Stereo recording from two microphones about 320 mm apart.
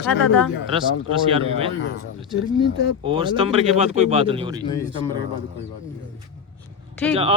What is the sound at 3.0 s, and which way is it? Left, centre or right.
Speech, centre.